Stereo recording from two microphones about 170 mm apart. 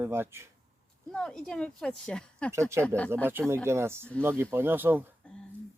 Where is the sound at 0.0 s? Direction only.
15° right (ahead or behind).